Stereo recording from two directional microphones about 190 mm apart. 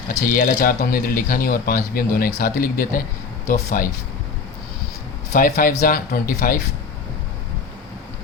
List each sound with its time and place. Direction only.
0.3 s speech: 50° left (ahead or behind)
5.3 s speech: 50° left (ahead or behind)